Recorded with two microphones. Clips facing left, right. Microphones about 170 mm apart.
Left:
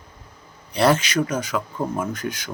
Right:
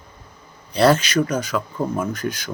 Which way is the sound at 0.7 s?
20° left (ahead or behind).